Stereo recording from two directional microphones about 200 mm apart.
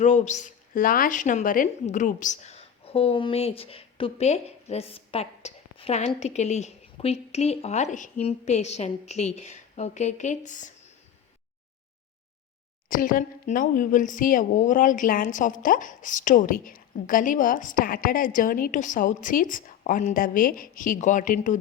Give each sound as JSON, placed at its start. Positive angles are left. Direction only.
{"t": 0.0, "sound": "speech", "side_deg": 35}
{"t": 12.9, "sound": "speech", "side_deg": 45}